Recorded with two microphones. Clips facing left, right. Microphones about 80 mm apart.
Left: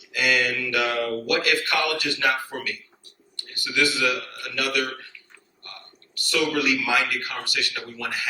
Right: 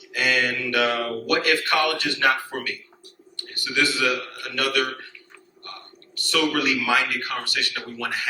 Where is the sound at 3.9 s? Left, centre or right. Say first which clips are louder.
Right 1 dB; right.